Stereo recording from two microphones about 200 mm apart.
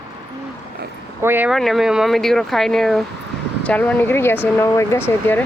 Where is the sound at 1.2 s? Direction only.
10° right (ahead or behind).